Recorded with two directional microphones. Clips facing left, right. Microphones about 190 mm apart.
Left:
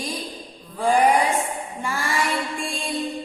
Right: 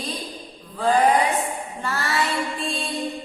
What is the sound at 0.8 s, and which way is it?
Speech, 15° left (ahead or behind).